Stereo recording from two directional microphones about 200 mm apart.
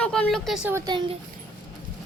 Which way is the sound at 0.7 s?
20° right (ahead or behind).